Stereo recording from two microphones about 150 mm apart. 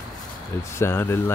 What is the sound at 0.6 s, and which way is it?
Speech, 20° left (ahead or behind).